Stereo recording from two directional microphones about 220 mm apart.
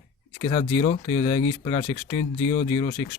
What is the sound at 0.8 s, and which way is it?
Speech, 35° left (ahead or behind).